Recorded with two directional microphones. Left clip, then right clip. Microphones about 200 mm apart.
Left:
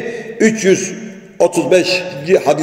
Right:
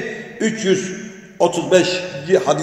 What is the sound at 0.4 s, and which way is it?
A man's voice, 25° left (ahead or behind).